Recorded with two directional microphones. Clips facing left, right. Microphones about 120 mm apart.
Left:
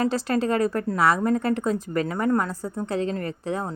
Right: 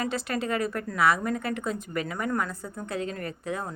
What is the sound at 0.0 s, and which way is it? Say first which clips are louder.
Speech: left 6 dB; 35° left (ahead or behind).